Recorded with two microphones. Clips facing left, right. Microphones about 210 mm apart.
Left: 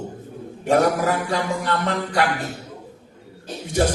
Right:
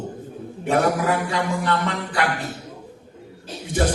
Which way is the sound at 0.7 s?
45° left (ahead or behind).